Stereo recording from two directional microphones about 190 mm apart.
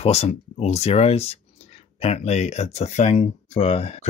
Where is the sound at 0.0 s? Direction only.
35° left (ahead or behind).